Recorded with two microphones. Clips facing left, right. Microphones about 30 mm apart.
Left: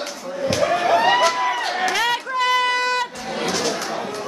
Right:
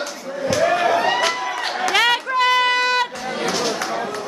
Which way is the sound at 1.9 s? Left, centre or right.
Right.